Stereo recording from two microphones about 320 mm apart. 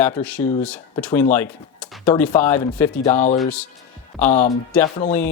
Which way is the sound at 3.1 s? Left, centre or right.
Left.